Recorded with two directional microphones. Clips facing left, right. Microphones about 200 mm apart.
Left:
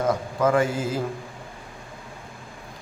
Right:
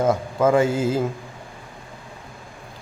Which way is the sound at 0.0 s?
25° right (ahead or behind).